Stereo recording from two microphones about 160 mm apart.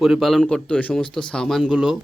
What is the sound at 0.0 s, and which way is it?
Speech, centre (ahead or behind).